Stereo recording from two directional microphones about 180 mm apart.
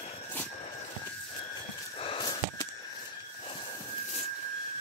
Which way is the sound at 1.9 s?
30° left (ahead or behind).